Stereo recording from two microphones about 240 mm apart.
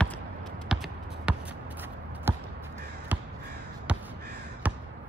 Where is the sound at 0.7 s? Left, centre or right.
Centre.